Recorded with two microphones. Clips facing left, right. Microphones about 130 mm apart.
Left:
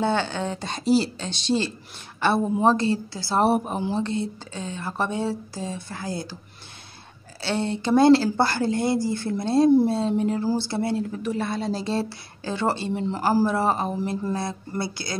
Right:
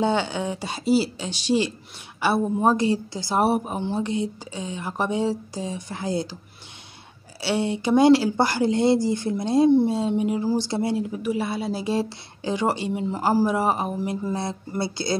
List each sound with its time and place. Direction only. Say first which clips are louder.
0.0 s speech: right 1 dB; 15° right (ahead or behind)
3.4 s speech: left 1 dB; centre (ahead or behind)
4.0 s speech: right 1 dB; 15° right (ahead or behind)
7.4 s speech: right 2 dB; 15° right (ahead or behind)